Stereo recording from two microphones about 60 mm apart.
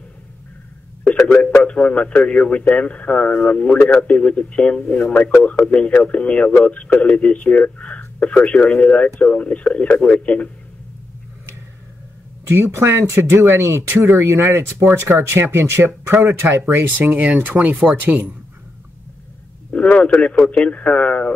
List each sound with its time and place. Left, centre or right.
1.4 s speech: left
12.4 s speech: right
17.0 s speech: right
19.7 s a sound: left
20.2 s speech: centre